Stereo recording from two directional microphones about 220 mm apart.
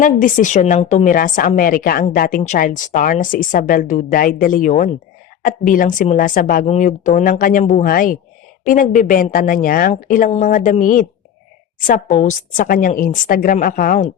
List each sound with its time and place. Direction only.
0.0 s a woman's voice: 35° left (ahead or behind)